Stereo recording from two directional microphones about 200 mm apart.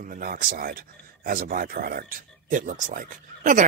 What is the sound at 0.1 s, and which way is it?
Speech, 45° right (ahead or behind).